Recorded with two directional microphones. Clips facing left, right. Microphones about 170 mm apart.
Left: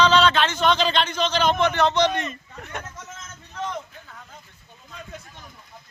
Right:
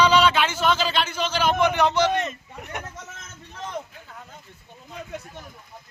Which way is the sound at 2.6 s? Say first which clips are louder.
Right 1 dB; 15° right (ahead or behind).